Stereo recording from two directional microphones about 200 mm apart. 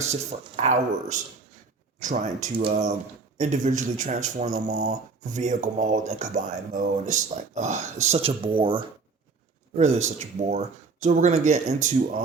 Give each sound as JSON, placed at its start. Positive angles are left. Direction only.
{"t": 0.0, "sound": "speech", "side_deg": -35}
{"t": 2.6, "sound": "speech", "side_deg": -25}
{"t": 3.3, "sound": "speech", "side_deg": -40}